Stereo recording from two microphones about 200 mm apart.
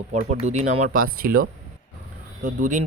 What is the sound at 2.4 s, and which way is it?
Speech, 40° right (ahead or behind).